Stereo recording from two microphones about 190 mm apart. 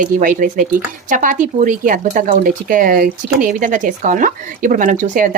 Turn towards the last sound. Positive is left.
turn(degrees=-45)  # may be behind; listen again after turning